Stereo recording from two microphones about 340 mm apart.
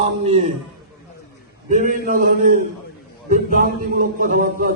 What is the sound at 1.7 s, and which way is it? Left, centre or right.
A man's voice, right.